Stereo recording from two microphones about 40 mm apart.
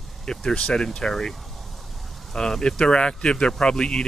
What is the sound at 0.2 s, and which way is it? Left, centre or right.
Speech, centre.